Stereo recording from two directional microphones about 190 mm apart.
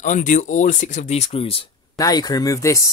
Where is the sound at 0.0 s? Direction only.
40° left (ahead or behind).